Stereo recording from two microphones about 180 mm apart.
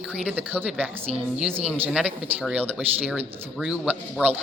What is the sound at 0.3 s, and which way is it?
Speech, 10° right (ahead or behind).